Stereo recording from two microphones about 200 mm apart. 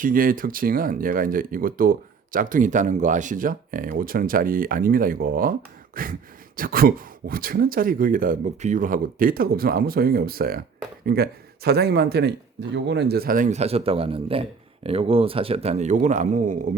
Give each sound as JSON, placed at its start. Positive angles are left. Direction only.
{"t": 0.0, "sound": "a man's voice", "side_deg": -45}